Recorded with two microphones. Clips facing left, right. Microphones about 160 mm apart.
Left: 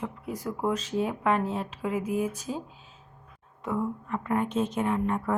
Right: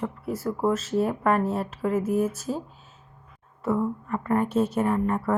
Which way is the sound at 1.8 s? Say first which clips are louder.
Right 5 dB; 10° left (ahead or behind).